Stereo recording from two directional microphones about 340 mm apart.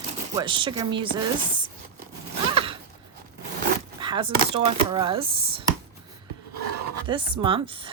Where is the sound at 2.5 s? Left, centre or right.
Centre.